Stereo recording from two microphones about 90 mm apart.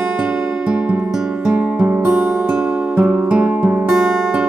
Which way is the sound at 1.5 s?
10° right (ahead or behind).